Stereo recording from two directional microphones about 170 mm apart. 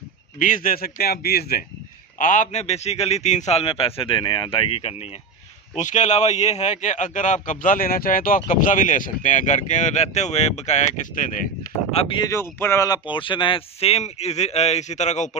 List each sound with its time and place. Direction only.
0.4 s speech: 50° left (ahead or behind)
2.1 s speech: 50° left (ahead or behind); by 4.9 s 30° left (ahead or behind)
5.8 s speech: 45° left (ahead or behind)
11.9 s speech: 30° left (ahead or behind)
12.3 s speech: 15° left (ahead or behind); by 15.3 s 45° left (ahead or behind)